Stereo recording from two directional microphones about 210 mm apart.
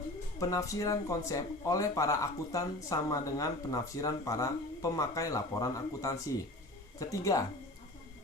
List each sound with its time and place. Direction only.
0.3 s speech: 15° left (ahead or behind)